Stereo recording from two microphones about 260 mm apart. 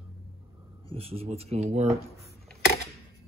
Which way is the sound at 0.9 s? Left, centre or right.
Right.